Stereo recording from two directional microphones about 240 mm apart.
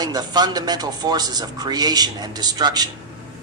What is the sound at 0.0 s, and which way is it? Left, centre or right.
Speech, centre.